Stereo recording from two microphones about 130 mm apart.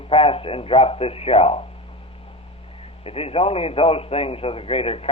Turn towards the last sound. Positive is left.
turn(degrees=45)  # may be behind; listen again after turning